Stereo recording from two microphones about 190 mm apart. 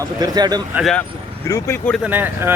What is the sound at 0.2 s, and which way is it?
Speech, 20° right (ahead or behind).